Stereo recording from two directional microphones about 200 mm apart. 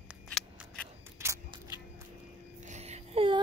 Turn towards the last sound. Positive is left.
turn(degrees=-30)  # may be behind; listen again after turning